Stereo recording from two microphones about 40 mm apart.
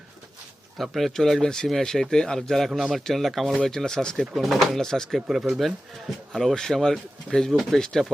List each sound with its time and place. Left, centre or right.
0.8 s speech: centre
2.6 s speech: centre
3.0 s speech: centre
3.6 s speech: centre
4.4 s speech: centre